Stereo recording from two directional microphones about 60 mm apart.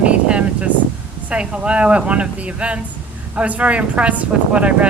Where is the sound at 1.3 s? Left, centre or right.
Centre.